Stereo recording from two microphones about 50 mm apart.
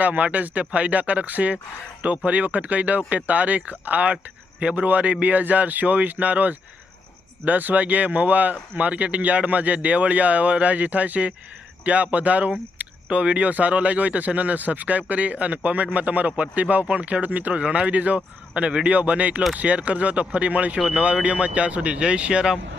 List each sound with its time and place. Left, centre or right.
0.0 s speech: right